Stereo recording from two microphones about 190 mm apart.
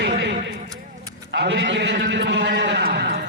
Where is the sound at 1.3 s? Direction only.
75° right (ahead or behind).